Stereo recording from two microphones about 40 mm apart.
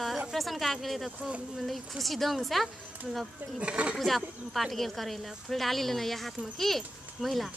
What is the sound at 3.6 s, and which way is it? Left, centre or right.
Speech, right.